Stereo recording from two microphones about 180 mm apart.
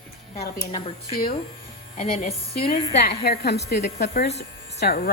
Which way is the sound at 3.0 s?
65° left (ahead or behind).